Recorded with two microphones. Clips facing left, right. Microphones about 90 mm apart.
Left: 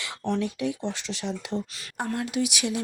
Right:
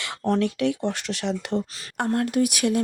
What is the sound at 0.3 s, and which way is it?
Speech, 65° right (ahead or behind).